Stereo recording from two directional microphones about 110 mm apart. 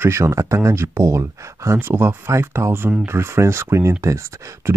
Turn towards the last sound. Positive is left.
turn(degrees=-25)  # may be behind; listen again after turning